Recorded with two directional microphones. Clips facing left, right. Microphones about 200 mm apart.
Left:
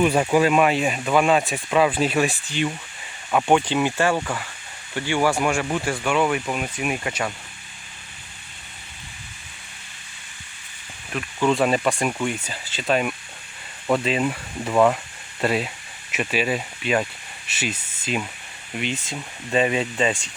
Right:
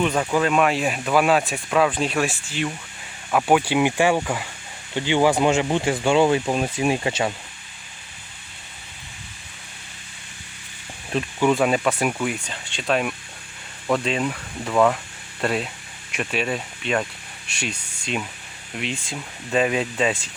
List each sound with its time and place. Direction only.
0.0 s speech: 15° left (ahead or behind); by 7.3 s 25° right (ahead or behind)
11.1 s speech: 30° right (ahead or behind)
11.5 s speech: centre (ahead or behind)